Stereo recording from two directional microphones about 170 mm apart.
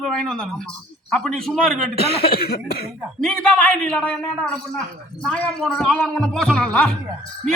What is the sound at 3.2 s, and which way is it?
A man's voice, 5° left (ahead or behind).